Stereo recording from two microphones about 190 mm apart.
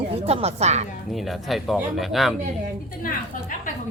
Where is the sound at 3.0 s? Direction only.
45° left (ahead or behind).